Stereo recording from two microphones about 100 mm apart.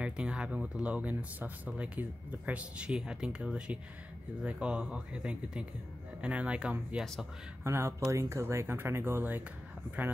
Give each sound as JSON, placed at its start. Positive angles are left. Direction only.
{"t": 0.0, "sound": "speech", "side_deg": -10}
{"t": 7.6, "sound": "speech", "side_deg": -25}